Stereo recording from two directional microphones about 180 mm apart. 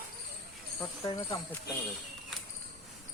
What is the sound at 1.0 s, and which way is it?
Speech, 30° left (ahead or behind).